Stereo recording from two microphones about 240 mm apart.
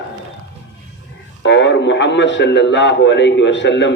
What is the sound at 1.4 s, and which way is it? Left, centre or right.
A man's voice, left.